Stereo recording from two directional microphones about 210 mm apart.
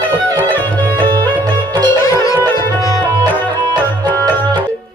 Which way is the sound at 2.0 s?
15° left (ahead or behind).